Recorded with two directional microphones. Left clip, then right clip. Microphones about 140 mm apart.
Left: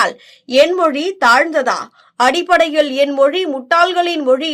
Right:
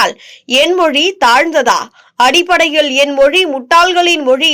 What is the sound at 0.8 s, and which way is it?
A woman's voice, 20° right (ahead or behind).